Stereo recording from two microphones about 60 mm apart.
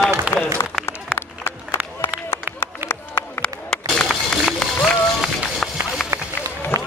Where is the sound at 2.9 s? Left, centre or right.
Left.